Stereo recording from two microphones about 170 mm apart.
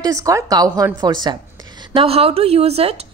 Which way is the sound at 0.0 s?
20° right (ahead or behind).